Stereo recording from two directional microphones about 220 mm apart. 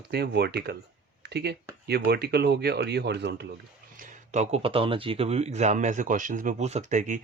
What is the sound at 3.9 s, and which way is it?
Speech, 35° right (ahead or behind).